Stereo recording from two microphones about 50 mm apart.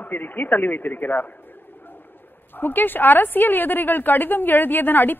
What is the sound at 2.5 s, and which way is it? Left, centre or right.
A man's voice, left.